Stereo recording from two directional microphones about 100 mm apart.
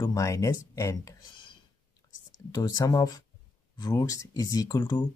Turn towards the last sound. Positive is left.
turn(degrees=45)  # may be behind; listen again after turning